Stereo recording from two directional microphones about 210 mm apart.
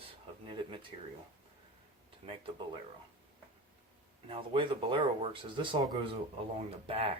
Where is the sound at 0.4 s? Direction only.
25° right (ahead or behind).